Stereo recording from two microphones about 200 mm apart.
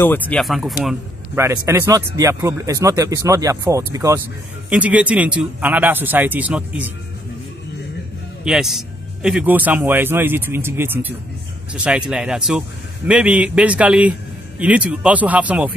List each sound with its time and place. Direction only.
0.0 s speech: 10° left (ahead or behind)
1.3 s speech: 15° right (ahead or behind)
8.5 s speech: centre (ahead or behind)